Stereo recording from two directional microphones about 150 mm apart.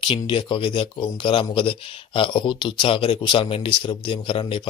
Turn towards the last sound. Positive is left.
turn(degrees=35)  # may be behind; listen again after turning